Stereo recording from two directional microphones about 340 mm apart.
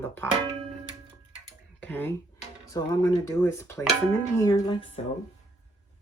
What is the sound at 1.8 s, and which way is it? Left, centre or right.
Speech, centre.